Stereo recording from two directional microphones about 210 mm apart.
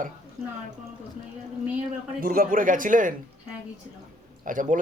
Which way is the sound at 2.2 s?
45° right (ahead or behind).